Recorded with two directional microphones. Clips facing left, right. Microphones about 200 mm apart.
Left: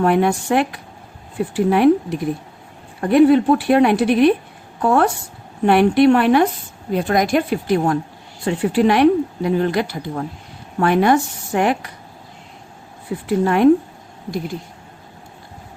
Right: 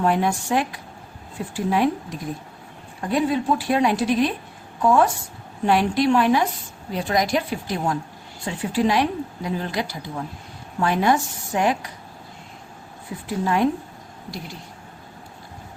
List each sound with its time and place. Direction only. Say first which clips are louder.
0.0 s a woman's voice: left 5 dB; 60° left (ahead or behind)
13.2 s a woman's voice: left 5 dB; 60° left (ahead or behind)